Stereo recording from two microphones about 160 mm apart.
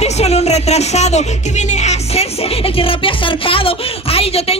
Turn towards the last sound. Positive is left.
turn(degrees=40)  # may be behind; listen again after turning